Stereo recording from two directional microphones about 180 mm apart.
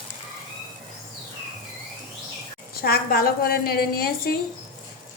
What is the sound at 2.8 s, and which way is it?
A woman's voice, 55° left (ahead or behind).